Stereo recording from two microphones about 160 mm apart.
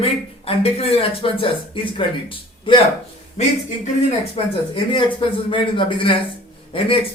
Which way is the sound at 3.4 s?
45° left (ahead or behind).